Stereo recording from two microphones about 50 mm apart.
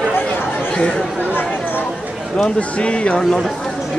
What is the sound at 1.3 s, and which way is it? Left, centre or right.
Speech, left.